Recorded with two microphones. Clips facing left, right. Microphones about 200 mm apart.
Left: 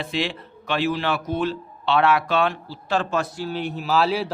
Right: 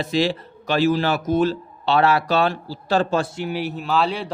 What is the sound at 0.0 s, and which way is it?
Speech, 40° right (ahead or behind).